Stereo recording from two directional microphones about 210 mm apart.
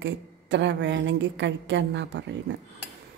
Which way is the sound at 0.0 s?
60° right (ahead or behind).